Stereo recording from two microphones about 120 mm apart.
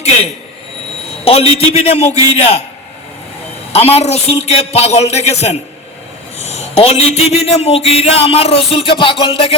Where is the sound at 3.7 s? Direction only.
60° left (ahead or behind).